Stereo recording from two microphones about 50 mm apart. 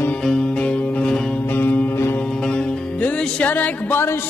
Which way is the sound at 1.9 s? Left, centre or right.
Left.